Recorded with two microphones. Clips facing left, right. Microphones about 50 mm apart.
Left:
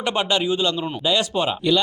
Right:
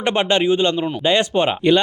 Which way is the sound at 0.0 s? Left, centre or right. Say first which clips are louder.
Right 4 dB; right.